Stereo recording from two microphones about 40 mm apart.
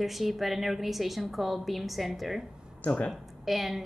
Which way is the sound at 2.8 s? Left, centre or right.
Left.